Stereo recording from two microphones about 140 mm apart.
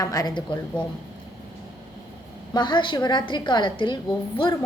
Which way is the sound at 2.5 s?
35° left (ahead or behind).